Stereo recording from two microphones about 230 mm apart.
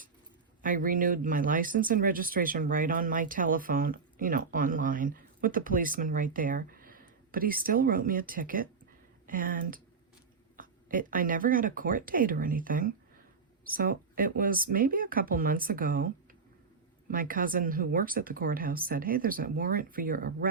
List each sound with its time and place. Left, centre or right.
0.6 s speech: right